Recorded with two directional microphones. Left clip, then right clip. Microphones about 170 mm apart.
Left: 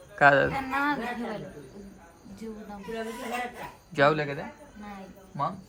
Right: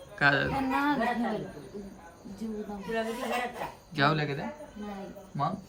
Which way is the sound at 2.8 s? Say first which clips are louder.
Right 3 dB; centre (ahead or behind).